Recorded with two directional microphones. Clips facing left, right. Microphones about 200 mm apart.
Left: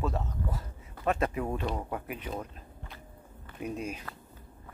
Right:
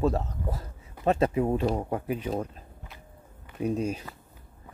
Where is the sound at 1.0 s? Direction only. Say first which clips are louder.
Right 6 dB; 30° right (ahead or behind).